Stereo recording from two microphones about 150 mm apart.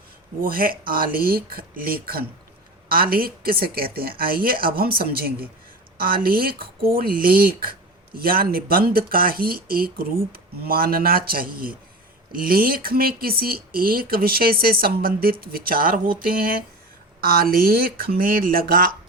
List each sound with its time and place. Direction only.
0.4 s speech: 75° right (ahead or behind)
6.0 s speech: 80° right